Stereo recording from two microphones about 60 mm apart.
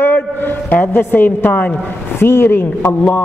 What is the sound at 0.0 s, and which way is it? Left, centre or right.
A woman's voice, left.